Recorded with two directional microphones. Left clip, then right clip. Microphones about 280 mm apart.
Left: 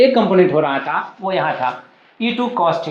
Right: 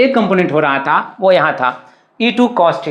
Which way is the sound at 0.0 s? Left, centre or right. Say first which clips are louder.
Even; right.